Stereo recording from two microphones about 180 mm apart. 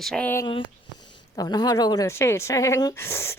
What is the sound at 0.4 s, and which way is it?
A woman's voice, 25° left (ahead or behind).